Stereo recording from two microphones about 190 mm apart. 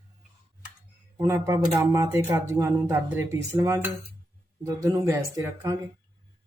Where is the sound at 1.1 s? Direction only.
15° right (ahead or behind).